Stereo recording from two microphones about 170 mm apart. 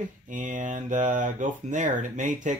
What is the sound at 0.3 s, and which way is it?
Speech, 45° right (ahead or behind).